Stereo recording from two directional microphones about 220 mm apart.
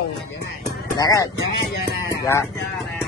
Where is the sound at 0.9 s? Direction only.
15° left (ahead or behind).